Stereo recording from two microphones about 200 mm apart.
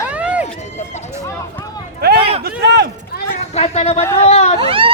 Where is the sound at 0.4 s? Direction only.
35° left (ahead or behind).